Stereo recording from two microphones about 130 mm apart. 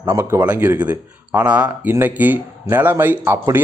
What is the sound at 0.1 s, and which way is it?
Speech, 20° right (ahead or behind).